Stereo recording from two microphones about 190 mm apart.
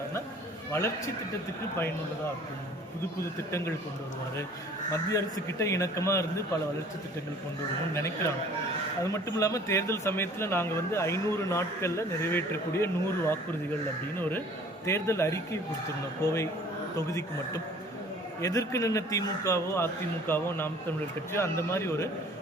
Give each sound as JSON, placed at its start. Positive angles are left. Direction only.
{"t": 0.7, "sound": "speech", "side_deg": 15}
{"t": 4.9, "sound": "speech", "side_deg": 15}
{"t": 7.9, "sound": "speech", "side_deg": 15}